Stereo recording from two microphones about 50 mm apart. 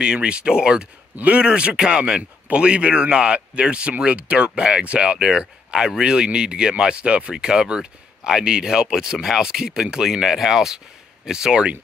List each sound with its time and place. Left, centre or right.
0.0 s speech: centre
1.1 s speech: right